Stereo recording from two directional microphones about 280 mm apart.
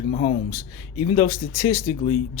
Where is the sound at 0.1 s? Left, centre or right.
Left.